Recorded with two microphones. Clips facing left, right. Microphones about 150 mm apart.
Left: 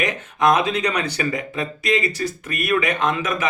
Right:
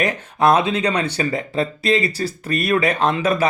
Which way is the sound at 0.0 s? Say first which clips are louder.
Right 2 dB; 30° right (ahead or behind).